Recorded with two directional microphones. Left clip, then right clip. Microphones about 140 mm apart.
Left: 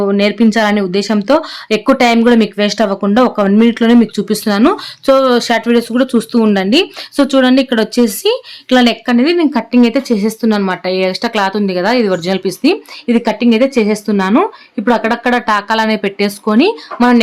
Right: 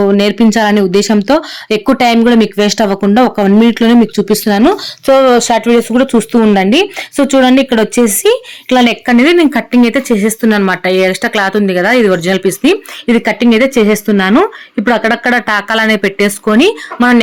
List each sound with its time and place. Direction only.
0.0 s speech: 25° right (ahead or behind)
2.6 s speech: 25° right (ahead or behind)
9.0 s speech: 30° right (ahead or behind)
9.5 s speech: 10° right (ahead or behind)